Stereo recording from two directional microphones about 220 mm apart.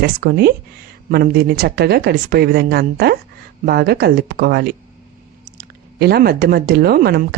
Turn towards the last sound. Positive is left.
turn(degrees=-45)  # may be behind; listen again after turning